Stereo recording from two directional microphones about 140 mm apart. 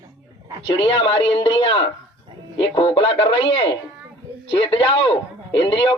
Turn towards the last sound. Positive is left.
turn(degrees=35)  # may be behind; listen again after turning